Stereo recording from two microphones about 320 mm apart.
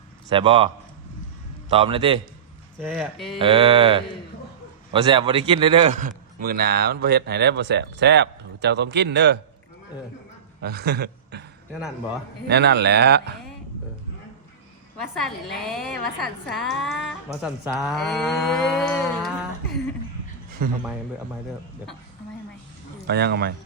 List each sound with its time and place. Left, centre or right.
0.3 s a sound: centre
1.7 s a sound: centre
2.8 s speech: centre
3.3 s a sound: centre
4.9 s a man's voice: centre; by 9.4 s right
10.6 s a man's voice: right
12.5 s speech: right
15.6 s speech: centre
20.6 s a man's voice: right
23.0 s speech: right